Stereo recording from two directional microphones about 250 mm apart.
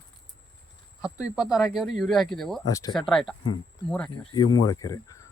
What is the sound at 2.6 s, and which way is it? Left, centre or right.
Speech, centre.